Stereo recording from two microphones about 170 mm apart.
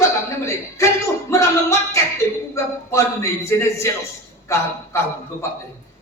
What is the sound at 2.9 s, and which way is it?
A man's voice, 15° left (ahead or behind).